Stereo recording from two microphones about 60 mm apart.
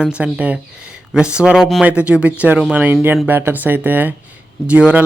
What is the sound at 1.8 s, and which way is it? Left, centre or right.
Speech, right.